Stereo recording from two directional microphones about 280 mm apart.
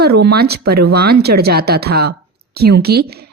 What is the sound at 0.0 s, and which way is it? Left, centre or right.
Speech, right.